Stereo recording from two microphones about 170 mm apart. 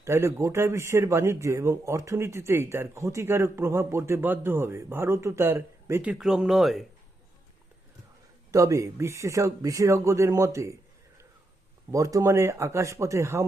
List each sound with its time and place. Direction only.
0.0 s a man's voice: 15° right (ahead or behind); by 6.8 s centre (ahead or behind)
8.5 s a man's voice: 20° right (ahead or behind)
11.9 s a man's voice: 20° right (ahead or behind)